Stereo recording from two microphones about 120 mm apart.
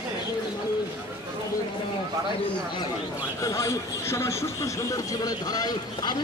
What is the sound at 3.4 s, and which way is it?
A man's voice, 25° left (ahead or behind).